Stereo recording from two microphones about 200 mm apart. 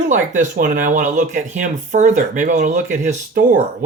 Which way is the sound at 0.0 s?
35° right (ahead or behind).